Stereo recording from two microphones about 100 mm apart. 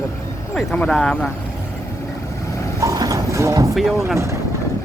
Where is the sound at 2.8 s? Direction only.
35° right (ahead or behind).